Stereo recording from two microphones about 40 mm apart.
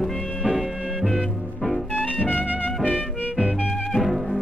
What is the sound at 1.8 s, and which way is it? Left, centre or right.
Music, left.